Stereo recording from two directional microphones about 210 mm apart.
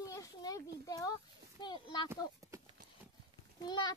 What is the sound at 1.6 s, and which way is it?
Speech, 20° left (ahead or behind).